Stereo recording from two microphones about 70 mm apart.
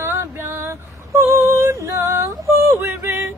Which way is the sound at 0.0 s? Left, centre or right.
Right.